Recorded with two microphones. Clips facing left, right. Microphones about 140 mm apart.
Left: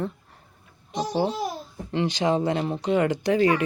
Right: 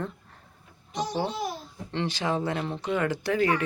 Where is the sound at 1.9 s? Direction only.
15° left (ahead or behind).